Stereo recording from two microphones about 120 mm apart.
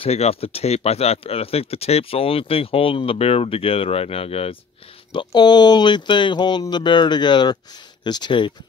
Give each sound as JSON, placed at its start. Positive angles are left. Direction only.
{"t": 0.0, "sound": "speech", "side_deg": 55}
{"t": 5.1, "sound": "speech", "side_deg": 40}